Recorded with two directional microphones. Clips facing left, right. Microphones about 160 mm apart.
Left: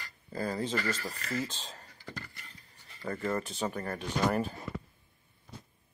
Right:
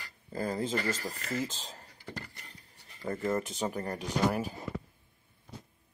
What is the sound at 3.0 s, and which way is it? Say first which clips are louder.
Speech: right 2 dB; 15° right (ahead or behind).